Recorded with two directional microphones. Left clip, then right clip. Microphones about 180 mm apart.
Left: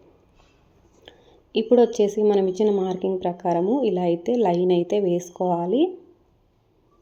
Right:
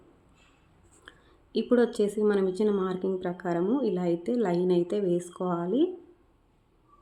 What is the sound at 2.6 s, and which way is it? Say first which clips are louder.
Speech: left 6 dB; 5° left (ahead or behind).